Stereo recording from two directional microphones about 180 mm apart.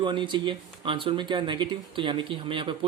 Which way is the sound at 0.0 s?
25° right (ahead or behind).